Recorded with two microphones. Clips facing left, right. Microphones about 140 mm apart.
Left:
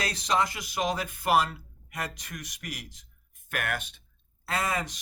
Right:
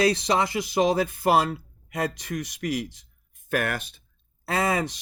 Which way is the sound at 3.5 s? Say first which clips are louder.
Right 6 dB; 35° right (ahead or behind).